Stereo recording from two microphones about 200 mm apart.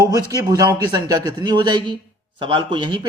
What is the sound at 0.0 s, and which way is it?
Speech, 20° right (ahead or behind).